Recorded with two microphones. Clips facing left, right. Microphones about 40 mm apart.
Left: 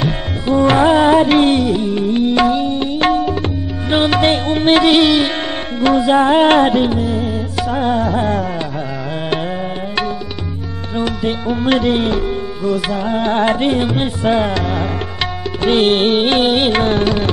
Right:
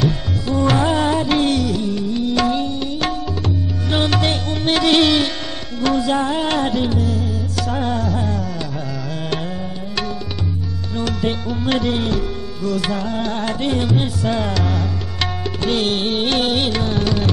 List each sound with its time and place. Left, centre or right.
0.0 s tabla: left
1.2 s music: left
2.0 s tabla: left
2.3 s tabla: left
2.7 s tabla: left
3.9 s music: left
4.8 s music: centre
5.8 s tabla: left
6.2 s music: left
11.0 s music: centre
11.4 s music: left
12.6 s music: centre
13.0 s music: left